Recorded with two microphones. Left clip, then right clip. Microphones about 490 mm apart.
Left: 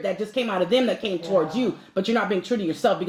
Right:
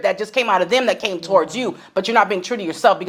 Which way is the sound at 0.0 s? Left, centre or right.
Right.